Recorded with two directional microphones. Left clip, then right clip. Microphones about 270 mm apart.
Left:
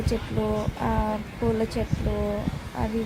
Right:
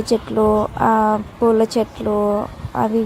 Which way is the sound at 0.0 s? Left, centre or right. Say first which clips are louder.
Right 11 dB; right.